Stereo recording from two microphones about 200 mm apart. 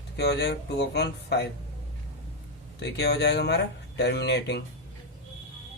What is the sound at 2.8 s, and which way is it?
Speech, 55° left (ahead or behind).